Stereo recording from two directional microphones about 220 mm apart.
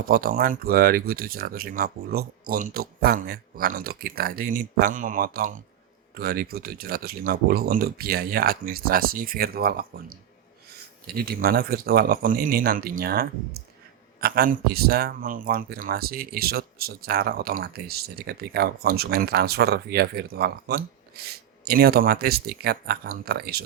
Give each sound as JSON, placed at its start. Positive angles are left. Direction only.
{"t": 0.0, "sound": "speech", "side_deg": -40}